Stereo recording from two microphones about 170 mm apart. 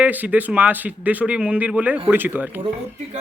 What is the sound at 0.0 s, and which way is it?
A man's voice, 10° right (ahead or behind).